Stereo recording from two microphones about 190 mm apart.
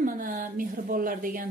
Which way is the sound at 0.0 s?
45° right (ahead or behind).